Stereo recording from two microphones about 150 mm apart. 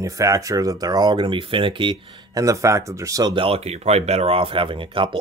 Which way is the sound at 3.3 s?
40° right (ahead or behind).